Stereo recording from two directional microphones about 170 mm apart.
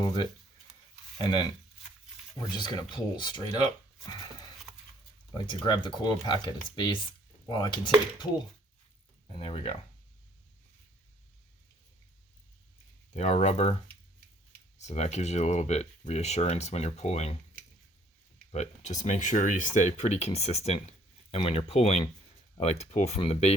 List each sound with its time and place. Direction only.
0.0 s speech: 25° left (ahead or behind)
2.5 s speech: 25° left (ahead or behind)
5.5 s speech: 25° left (ahead or behind)
7.4 s dishes: 25° left (ahead or behind)
9.3 s speech: 30° left (ahead or behind)
13.1 s speech: 40° left (ahead or behind)
14.8 s speech: 40° left (ahead or behind)
18.5 s speech: 40° left (ahead or behind)